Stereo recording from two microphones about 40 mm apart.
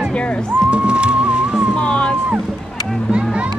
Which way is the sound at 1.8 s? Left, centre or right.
Left.